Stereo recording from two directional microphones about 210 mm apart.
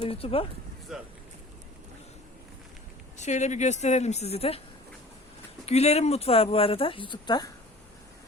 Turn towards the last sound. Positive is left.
turn(degrees=20)  # may be behind; listen again after turning